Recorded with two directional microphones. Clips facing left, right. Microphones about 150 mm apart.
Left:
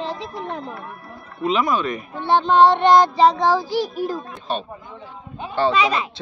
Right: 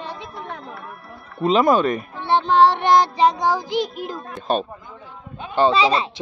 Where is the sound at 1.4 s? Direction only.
35° right (ahead or behind).